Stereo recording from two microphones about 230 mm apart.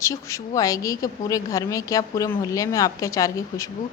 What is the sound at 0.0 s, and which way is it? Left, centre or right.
A woman's voice, centre.